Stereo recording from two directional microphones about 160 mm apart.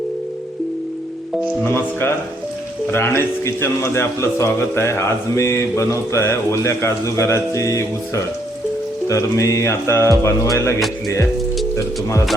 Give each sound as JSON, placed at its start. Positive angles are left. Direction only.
{"t": 1.6, "sound": "a man's voice", "side_deg": 15}